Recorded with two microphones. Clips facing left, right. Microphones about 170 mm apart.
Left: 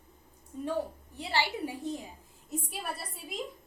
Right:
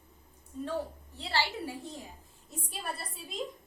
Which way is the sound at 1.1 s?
15° left (ahead or behind).